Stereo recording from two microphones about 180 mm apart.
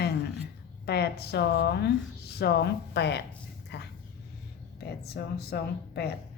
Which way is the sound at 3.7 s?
70° left (ahead or behind).